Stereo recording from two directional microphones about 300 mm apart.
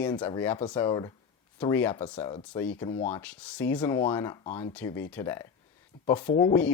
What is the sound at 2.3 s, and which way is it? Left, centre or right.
Speech, centre.